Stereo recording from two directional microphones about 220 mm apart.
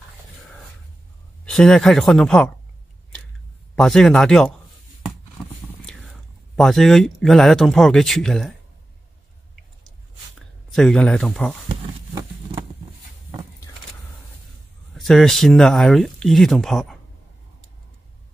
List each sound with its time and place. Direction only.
1.4 s speech: 5° left (ahead or behind)
3.7 s speech: centre (ahead or behind)
5.9 s speech: centre (ahead or behind)
10.7 s speech: 5° left (ahead or behind)
11.7 s a sound: 20° right (ahead or behind)
15.0 s speech: centre (ahead or behind)